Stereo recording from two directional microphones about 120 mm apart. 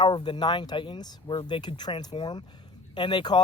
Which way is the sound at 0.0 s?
40° left (ahead or behind).